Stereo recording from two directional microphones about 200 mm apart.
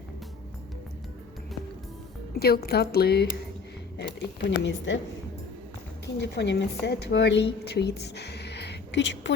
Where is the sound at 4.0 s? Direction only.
65° left (ahead or behind).